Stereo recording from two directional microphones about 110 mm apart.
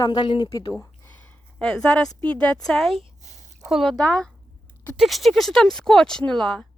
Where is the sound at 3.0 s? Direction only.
90° right.